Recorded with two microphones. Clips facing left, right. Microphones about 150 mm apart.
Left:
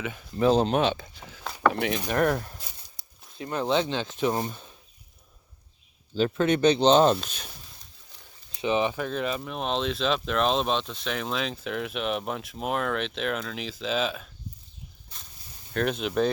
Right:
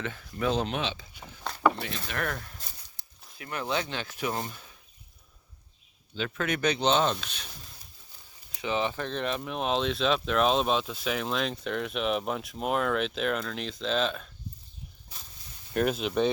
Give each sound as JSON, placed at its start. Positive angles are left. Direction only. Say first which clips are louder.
{"t": 0.0, "sound": "speech", "louder": "left 2 dB", "side_deg": 15}
{"t": 0.3, "sound": "speech", "louder": "left 7 dB", "side_deg": 35}
{"t": 1.7, "sound": "speech", "louder": "left 9 dB", "side_deg": 60}
{"t": 2.0, "sound": "speech", "louder": "left 9 dB", "side_deg": 40}
{"t": 3.0, "sound": "a sound", "louder": "left 1 dB", "side_deg": 15}
{"t": 3.3, "sound": "speech", "louder": "left 6 dB", "side_deg": 30}
{"t": 6.3, "sound": "speech", "louder": "left 6 dB", "side_deg": 30}
{"t": 8.5, "sound": "speech", "louder": "left 4 dB", "side_deg": 20}
{"t": 15.7, "sound": "speech", "louder": "even", "side_deg": -5}